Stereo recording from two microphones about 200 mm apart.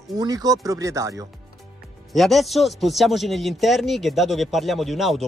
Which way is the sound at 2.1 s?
Centre (ahead or behind).